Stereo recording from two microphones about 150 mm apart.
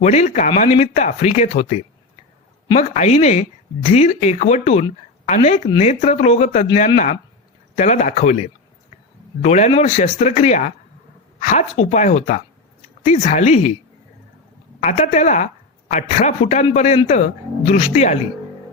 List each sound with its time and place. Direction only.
0.0 s speech: 50° left (ahead or behind)
14.8 s speech: 50° left (ahead or behind)